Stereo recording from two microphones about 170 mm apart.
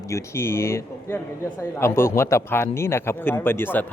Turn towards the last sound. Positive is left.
turn(degrees=10)  # may be behind; listen again after turning